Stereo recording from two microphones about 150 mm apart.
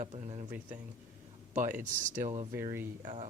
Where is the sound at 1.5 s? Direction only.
60° right (ahead or behind).